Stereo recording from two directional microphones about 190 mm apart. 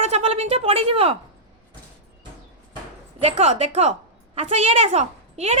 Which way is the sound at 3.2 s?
35° right (ahead or behind).